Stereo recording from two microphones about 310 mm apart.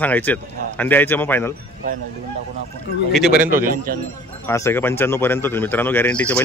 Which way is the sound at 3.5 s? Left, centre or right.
Right.